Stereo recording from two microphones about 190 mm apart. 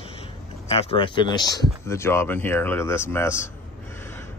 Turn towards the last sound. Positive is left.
turn(degrees=15)  # may be behind; listen again after turning